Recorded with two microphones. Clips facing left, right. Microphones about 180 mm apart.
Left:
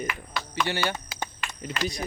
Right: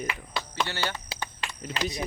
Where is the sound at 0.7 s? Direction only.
15° left (ahead or behind).